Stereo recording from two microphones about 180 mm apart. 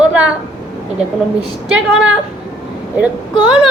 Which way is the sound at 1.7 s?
5° right (ahead or behind).